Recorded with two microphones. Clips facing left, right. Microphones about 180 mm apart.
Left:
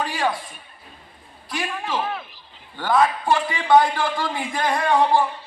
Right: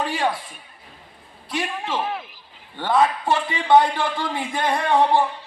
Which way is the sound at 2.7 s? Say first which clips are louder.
Even; 25° right (ahead or behind).